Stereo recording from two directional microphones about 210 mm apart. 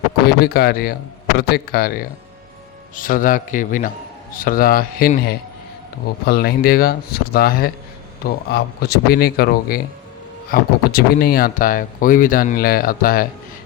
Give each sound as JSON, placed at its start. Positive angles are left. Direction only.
{"t": 0.3, "sound": "a man's voice", "side_deg": 50}